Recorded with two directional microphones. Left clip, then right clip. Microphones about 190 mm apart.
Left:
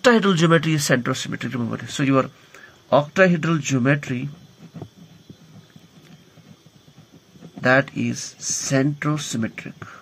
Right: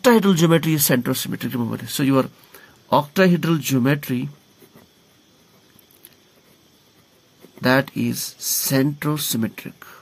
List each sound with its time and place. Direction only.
0.0 s speech: 35° right (ahead or behind); by 4.3 s 55° right (ahead or behind)
7.6 s speech: 55° right (ahead or behind)